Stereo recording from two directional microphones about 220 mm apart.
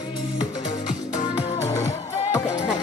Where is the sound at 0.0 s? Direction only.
20° left (ahead or behind).